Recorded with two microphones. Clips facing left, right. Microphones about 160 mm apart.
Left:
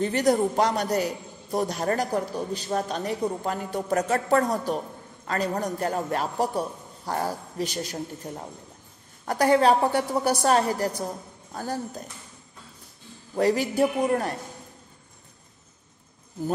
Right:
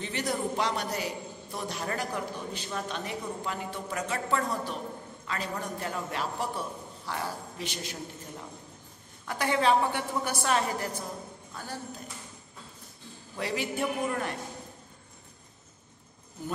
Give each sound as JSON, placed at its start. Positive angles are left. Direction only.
{"t": 0.0, "sound": "a man's voice", "side_deg": 45}
{"t": 13.4, "sound": "speech", "side_deg": 40}